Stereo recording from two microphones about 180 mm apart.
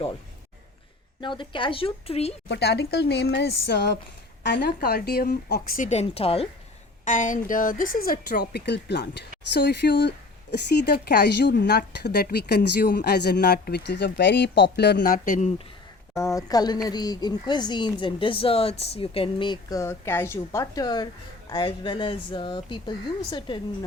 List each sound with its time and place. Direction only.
1.2 s speech: 25° left (ahead or behind)
2.5 s speech: 65° left (ahead or behind); by 6.5 s 30° left (ahead or behind)
7.0 s a woman's voice: 45° left (ahead or behind)
16.1 s speech: 15° left (ahead or behind)